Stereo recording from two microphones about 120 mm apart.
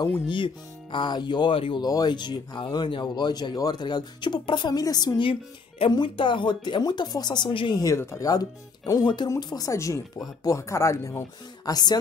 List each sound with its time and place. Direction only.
0.9 s speech: 40° left (ahead or behind)
1.9 s speech: 35° left (ahead or behind)
5.3 s speech: 45° left (ahead or behind)
7.8 s speech: 25° left (ahead or behind)